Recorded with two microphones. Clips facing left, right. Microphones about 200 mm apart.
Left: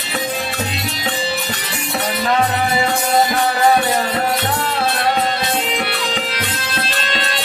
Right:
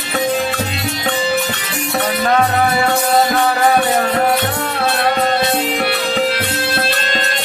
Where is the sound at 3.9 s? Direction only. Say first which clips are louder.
Right 4 dB; 50° right (ahead or behind).